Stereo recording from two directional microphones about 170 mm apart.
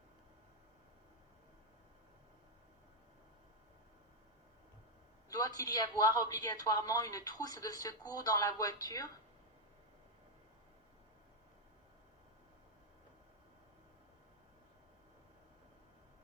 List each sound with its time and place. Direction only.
5.3 s speech: 20° left (ahead or behind)